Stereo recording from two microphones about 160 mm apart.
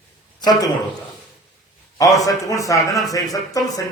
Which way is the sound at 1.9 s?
20° left (ahead or behind).